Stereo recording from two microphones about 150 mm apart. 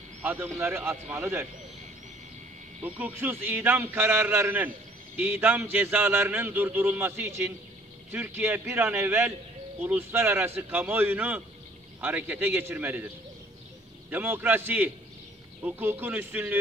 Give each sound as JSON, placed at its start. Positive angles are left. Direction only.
{"t": 0.2, "sound": "a man's voice", "side_deg": -15}
{"t": 3.0, "sound": "a man's voice", "side_deg": -15}
{"t": 14.1, "sound": "a man's voice", "side_deg": -10}